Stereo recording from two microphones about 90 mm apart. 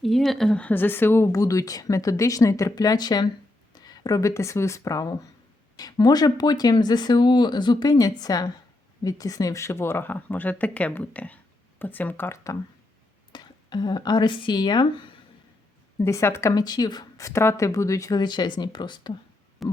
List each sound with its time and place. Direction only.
0.0 s speech: centre (ahead or behind)
0.6 s speech: 20° left (ahead or behind)
1.3 s speech: 40° left (ahead or behind); by 12.4 s 25° left (ahead or behind)
13.3 s speech: 55° left (ahead or behind)
16.0 s speech: 30° left (ahead or behind)
16.6 s speech: 50° left (ahead or behind)
18.2 s speech: 55° left (ahead or behind)
19.6 s a sound: centre (ahead or behind)